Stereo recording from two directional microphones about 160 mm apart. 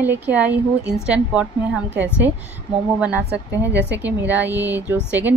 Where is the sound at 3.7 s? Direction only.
90° right.